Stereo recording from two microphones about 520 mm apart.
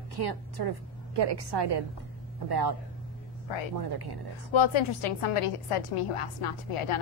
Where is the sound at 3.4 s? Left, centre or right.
Left.